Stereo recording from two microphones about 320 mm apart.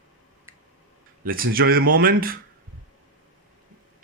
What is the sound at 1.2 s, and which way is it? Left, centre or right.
Speech, right.